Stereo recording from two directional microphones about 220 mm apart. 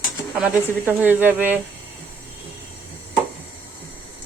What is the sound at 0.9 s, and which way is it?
Speech, 10° right (ahead or behind).